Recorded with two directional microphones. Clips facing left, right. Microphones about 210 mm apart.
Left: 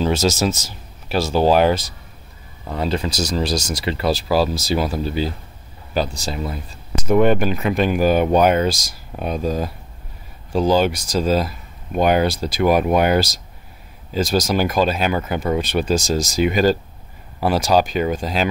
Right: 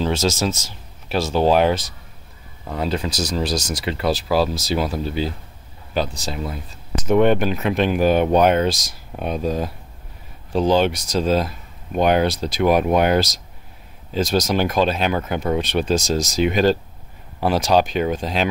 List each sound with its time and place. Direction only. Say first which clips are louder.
0.0 s speech: left 2 dB; 5° left (ahead or behind)